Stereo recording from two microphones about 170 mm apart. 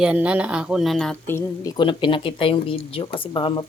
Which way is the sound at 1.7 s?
30° left (ahead or behind).